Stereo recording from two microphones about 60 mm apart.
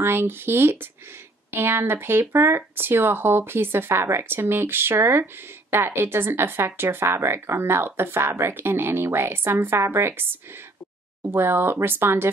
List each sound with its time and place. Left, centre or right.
0.0 s speech: right
11.2 s speech: right